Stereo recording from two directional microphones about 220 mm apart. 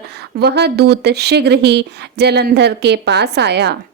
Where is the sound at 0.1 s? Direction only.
45° right (ahead or behind).